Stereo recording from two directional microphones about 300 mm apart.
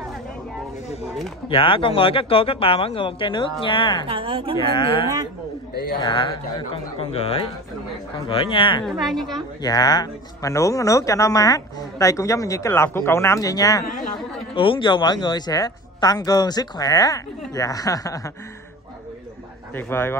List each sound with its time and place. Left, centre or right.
1.5 s speech: centre
4.1 s a woman's voice: centre
5.7 s a man's voice: left
5.9 s speech: centre
8.8 s a woman's voice: centre
9.6 s speech: centre
19.7 s speech: centre